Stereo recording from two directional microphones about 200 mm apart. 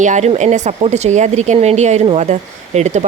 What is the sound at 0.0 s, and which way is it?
Speech, 35° right (ahead or behind).